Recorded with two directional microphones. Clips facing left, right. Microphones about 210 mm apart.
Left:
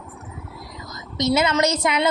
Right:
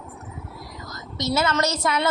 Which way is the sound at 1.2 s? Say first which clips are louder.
Left 4 dB; 20° left (ahead or behind).